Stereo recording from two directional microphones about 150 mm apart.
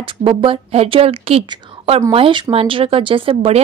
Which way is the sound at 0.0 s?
40° right (ahead or behind).